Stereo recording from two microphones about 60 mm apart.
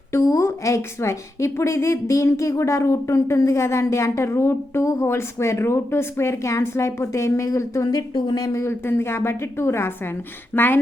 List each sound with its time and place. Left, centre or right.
0.1 s a woman's voice: left
8.4 s speech: left
8.6 s a woman's voice: left
10.5 s speech: left